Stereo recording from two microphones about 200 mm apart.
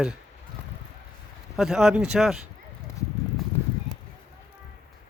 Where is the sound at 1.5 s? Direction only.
Centre (ahead or behind).